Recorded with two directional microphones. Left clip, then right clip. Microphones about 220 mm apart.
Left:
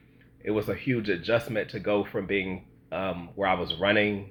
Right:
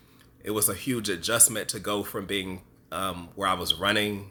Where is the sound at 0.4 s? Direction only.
20° right (ahead or behind).